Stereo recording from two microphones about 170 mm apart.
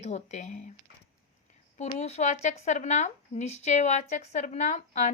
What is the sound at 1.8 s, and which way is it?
A woman's voice, 40° left (ahead or behind).